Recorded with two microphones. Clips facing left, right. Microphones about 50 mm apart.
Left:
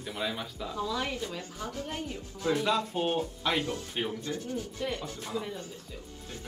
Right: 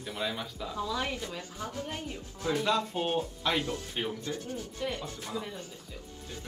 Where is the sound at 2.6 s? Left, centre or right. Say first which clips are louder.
Left 1 dB; centre.